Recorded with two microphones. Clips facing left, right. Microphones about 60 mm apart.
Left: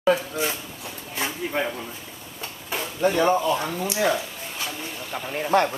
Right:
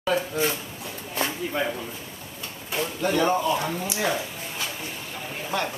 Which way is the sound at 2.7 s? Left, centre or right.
Left.